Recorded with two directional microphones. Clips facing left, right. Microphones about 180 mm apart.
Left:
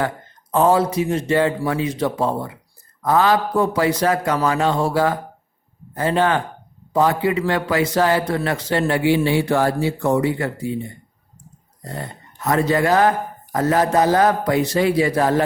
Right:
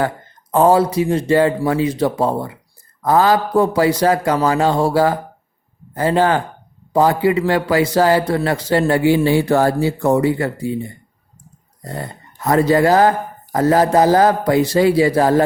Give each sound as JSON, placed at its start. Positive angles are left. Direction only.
{"t": 0.5, "sound": "a man's voice", "side_deg": -35}
{"t": 11.9, "sound": "a man's voice", "side_deg": -35}